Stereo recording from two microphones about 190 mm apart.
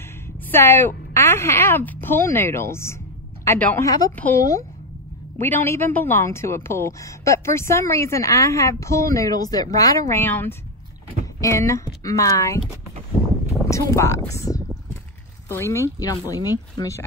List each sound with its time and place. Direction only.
0.5 s speech: 10° left (ahead or behind)
13.2 s a sound: 25° left (ahead or behind)
13.7 s speech: 15° left (ahead or behind)